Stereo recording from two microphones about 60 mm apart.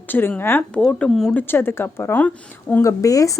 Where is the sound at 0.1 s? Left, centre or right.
Left.